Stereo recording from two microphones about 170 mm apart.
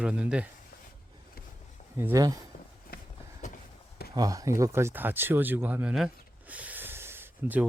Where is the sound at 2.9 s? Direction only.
60° left (ahead or behind).